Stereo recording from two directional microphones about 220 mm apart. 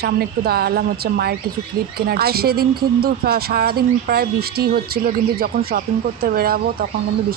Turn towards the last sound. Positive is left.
turn(degrees=-45)  # may be behind; listen again after turning